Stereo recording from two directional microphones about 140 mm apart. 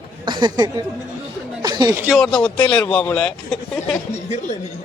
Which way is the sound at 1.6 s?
30° right (ahead or behind).